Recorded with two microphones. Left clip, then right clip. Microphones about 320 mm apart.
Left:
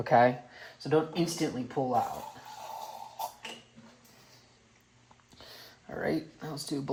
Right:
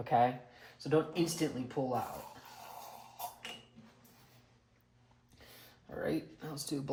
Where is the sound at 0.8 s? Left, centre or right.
Left.